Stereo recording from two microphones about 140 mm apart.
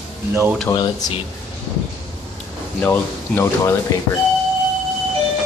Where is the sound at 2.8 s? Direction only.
15° left (ahead or behind).